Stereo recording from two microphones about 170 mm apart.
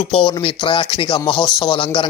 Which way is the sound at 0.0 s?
30° left (ahead or behind).